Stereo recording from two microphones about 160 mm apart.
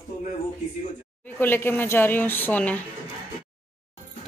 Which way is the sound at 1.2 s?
15° left (ahead or behind).